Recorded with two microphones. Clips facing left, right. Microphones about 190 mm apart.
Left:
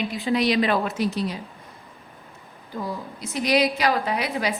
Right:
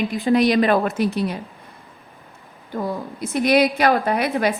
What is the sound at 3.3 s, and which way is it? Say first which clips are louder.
A woman's voice: right 5 dB; 55° right (ahead or behind).